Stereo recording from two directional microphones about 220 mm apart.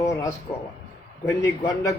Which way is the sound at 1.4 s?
15° left (ahead or behind).